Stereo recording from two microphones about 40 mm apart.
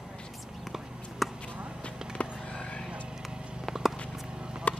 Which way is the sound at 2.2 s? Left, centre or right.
Left.